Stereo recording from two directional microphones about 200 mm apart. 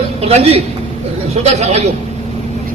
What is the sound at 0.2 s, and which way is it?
A man's voice, 30° right (ahead or behind).